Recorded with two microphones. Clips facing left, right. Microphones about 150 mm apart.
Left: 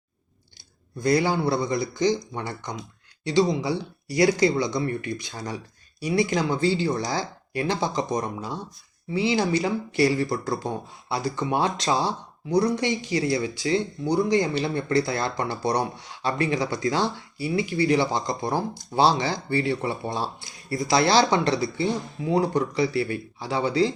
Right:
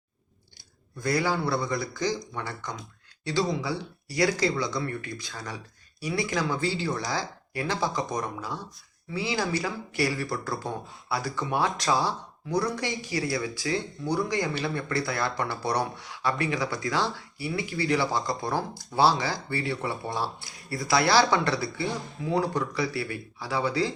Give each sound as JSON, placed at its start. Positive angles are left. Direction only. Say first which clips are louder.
{"t": 0.9, "sound": "speech", "louder": "left 5 dB", "side_deg": 20}